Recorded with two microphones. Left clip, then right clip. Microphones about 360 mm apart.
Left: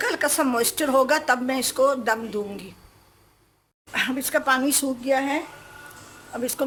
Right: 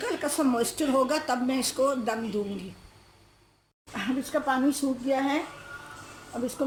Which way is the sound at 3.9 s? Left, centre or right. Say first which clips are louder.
Left 6 dB; left.